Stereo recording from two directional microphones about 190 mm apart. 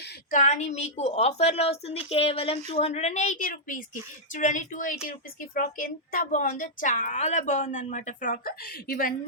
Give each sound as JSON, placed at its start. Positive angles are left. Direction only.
{"t": 0.3, "sound": "a woman's voice", "side_deg": 40}